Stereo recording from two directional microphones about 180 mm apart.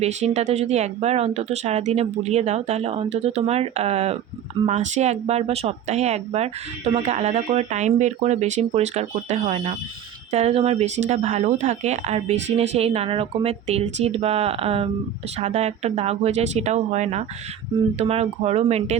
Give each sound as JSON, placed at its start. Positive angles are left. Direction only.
{"t": 0.0, "sound": "speech", "side_deg": -40}